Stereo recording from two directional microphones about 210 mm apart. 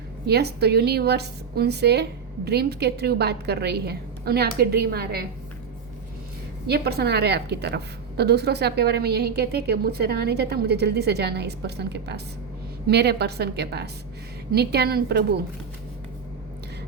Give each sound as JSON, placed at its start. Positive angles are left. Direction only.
{"t": 0.3, "sound": "a woman's voice", "side_deg": -50}
{"t": 6.7, "sound": "a woman's voice", "side_deg": -50}